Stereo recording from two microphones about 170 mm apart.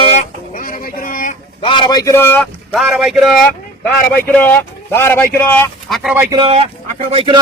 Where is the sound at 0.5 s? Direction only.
55° left (ahead or behind).